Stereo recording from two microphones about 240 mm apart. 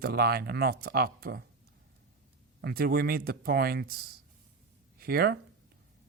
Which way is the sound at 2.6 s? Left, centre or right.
Right.